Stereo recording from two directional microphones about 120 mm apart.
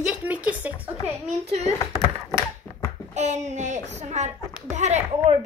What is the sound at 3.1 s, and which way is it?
A child's voice, 70° right (ahead or behind).